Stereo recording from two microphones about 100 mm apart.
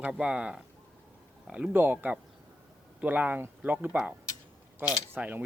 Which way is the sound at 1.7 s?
20° right (ahead or behind).